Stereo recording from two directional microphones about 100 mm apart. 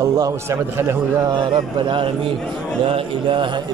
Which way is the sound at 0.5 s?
25° right (ahead or behind).